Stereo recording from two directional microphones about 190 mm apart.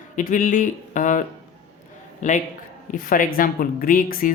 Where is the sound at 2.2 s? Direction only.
40° left (ahead or behind).